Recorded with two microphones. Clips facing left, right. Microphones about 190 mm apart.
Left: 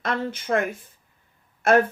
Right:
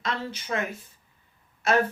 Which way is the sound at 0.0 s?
50° left (ahead or behind).